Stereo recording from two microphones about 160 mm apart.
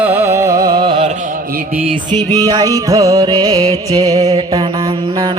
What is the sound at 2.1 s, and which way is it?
Music, 25° right (ahead or behind).